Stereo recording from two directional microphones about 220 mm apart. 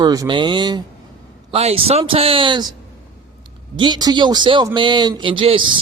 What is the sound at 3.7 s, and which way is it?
Speech, 20° right (ahead or behind).